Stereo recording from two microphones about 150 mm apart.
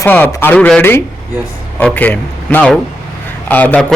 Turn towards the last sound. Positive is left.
turn(degrees=5)  # may be behind; listen again after turning